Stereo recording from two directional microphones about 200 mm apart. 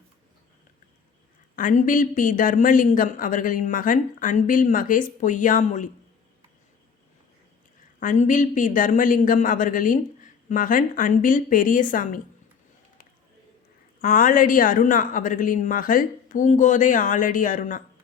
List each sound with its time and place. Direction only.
1.5 s speech: 40° left (ahead or behind)
7.9 s a woman's voice: 40° left (ahead or behind)
14.0 s speech: 45° left (ahead or behind)